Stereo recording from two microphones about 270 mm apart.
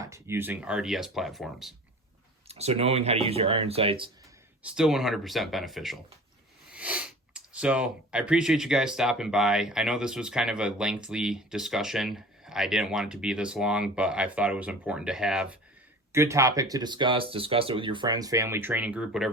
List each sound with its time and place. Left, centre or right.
0.0 s speech: centre
2.5 s speech: right
4.6 s speech: centre